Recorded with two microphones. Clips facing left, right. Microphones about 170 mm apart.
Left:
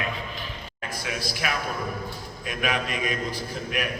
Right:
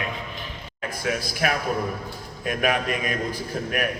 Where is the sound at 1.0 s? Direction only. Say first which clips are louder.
Right 6 dB; 45° right (ahead or behind).